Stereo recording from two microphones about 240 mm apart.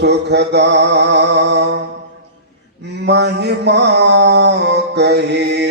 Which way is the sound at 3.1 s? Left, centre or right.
Right.